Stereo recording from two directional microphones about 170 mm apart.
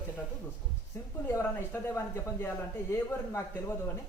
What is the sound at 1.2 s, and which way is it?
A man's voice, 10° left (ahead or behind).